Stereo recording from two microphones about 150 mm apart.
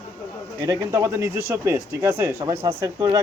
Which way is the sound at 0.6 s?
20° right (ahead or behind).